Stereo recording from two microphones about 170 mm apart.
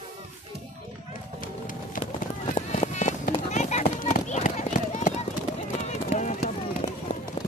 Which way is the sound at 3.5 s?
45° left (ahead or behind).